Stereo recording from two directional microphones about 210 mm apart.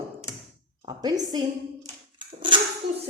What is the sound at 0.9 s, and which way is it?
Speech, 20° right (ahead or behind).